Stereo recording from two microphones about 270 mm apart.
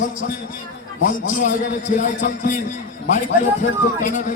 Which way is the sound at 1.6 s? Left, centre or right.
Left.